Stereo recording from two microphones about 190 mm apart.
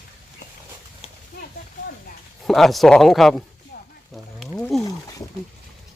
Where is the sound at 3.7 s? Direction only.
60° left (ahead or behind).